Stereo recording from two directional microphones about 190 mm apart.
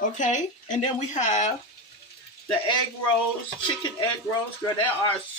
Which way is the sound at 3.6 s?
25° left (ahead or behind).